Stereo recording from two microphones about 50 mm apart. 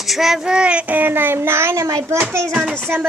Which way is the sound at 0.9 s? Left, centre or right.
Right.